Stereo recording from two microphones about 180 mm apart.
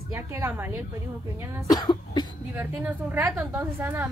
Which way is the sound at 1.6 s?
20° left (ahead or behind).